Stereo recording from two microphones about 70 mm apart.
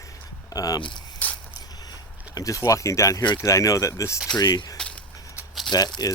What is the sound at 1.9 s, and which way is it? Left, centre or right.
Speech, left.